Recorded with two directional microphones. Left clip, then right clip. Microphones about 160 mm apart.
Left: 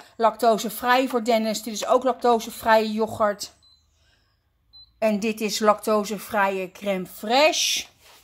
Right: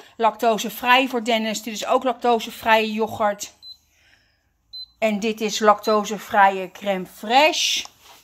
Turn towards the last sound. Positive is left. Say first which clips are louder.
# right 2 dB
turn(degrees=20)  # may be behind; listen again after turning